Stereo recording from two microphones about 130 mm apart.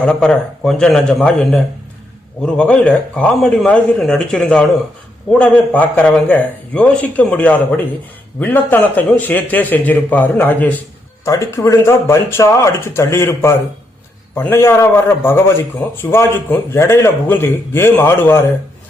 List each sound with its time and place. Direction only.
0.0 s a man's voice: 5° left (ahead or behind)